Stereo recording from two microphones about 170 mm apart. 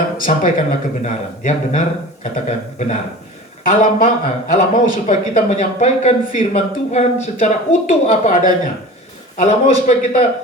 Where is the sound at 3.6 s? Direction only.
50° left (ahead or behind).